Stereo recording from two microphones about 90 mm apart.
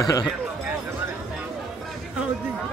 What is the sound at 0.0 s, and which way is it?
Speech, 40° left (ahead or behind).